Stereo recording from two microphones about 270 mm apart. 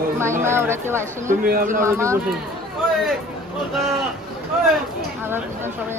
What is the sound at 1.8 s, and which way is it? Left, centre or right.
Speech, centre.